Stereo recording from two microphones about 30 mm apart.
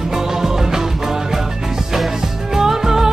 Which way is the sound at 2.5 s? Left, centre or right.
Centre.